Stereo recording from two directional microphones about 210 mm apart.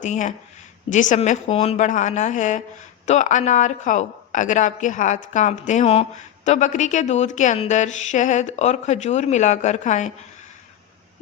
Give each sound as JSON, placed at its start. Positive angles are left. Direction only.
{"t": 0.0, "sound": "a woman's voice", "side_deg": 35}